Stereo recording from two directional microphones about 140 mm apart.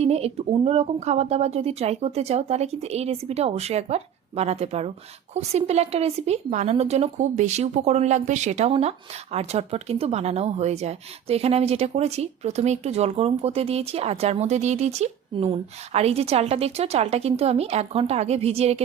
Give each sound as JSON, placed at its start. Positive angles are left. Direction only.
{"t": 0.0, "sound": "speech", "side_deg": -50}